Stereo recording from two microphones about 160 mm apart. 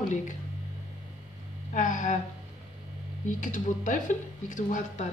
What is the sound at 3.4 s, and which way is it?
A woman's voice, 50° left (ahead or behind).